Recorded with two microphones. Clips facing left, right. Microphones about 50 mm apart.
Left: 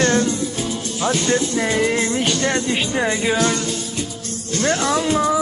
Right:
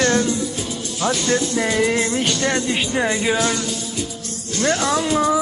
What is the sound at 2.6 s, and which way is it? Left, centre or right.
Speech, centre.